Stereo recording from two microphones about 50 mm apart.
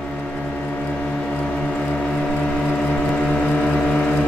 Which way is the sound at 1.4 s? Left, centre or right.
Centre.